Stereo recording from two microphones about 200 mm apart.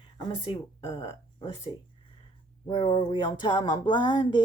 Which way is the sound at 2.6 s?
25° left (ahead or behind).